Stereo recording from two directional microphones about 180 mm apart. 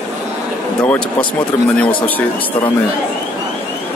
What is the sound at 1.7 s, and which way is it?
Speech, 10° left (ahead or behind).